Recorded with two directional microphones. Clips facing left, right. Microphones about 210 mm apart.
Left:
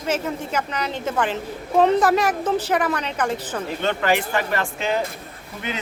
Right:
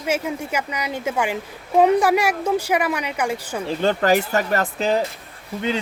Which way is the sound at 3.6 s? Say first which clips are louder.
Right 4 dB; 35° right (ahead or behind).